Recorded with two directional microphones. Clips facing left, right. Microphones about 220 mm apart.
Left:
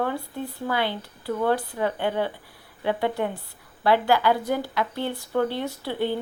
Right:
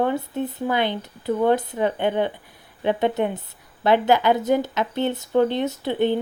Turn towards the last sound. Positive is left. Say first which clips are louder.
# right 5 dB
turn(degrees=-20)  # may be behind; listen again after turning